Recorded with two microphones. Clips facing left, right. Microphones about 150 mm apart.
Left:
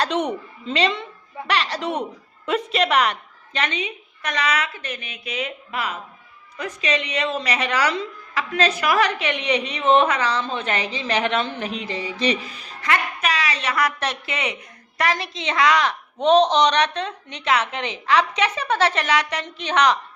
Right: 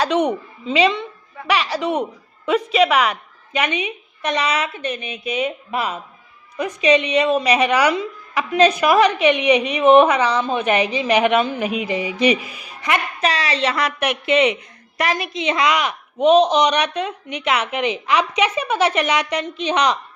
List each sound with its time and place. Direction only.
0.0 s a woman's voice: centre (ahead or behind)
13.2 s a woman's voice: 30° right (ahead or behind)